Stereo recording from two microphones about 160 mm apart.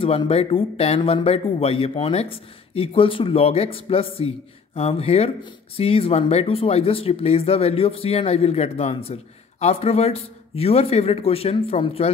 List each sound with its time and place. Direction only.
0.0 s speech: 35° left (ahead or behind)